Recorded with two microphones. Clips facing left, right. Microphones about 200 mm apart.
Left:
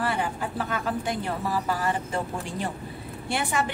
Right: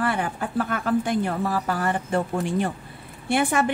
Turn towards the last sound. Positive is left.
turn(degrees=-50)  # may be behind; listen again after turning